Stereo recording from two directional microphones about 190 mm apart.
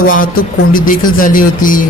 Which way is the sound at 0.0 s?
45° left (ahead or behind).